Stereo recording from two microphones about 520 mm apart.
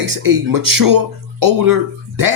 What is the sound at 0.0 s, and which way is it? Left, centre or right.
Speech, right.